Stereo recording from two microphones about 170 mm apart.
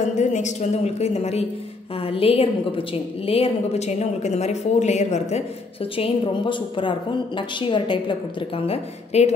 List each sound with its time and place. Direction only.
0.0 s a woman's voice: 45° left (ahead or behind)
5.9 s a woman's voice: 30° left (ahead or behind)